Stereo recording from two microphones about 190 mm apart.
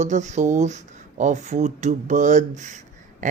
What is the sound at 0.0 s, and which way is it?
Speech, 40° right (ahead or behind).